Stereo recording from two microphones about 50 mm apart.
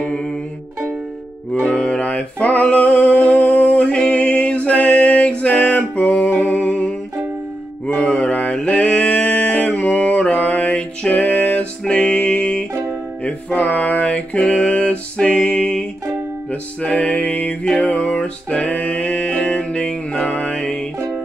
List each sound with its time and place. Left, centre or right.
0.0 s music: centre
1.7 s music: left
7.8 s mantra: left
8.6 s a sound: left
11.8 s music: centre
13.2 s music: left
16.8 s music: left